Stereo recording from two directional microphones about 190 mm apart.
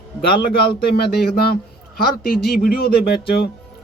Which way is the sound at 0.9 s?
55° left (ahead or behind).